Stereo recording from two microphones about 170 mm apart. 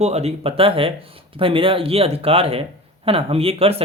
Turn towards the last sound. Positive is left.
turn(degrees=-35)  # may be behind; listen again after turning